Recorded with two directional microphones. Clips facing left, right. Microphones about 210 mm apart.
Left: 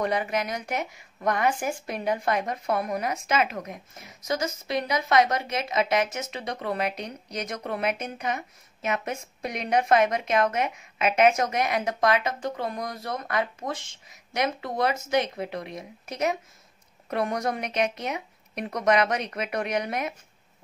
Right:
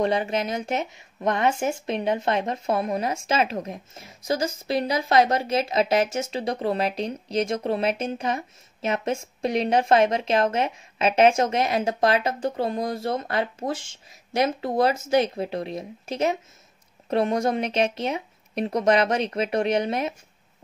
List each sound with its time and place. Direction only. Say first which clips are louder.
0.0 s speech: right 3 dB; 25° right (ahead or behind)